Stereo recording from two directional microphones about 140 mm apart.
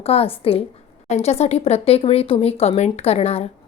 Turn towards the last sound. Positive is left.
turn(degrees=50)  # may be behind; listen again after turning